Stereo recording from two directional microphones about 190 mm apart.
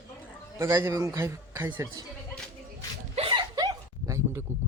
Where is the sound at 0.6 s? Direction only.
15° right (ahead or behind).